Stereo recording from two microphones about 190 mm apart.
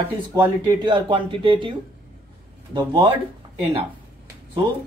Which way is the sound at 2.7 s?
25° right (ahead or behind).